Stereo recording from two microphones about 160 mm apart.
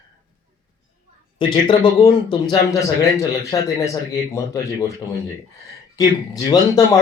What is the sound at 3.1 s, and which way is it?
Speech, 20° left (ahead or behind).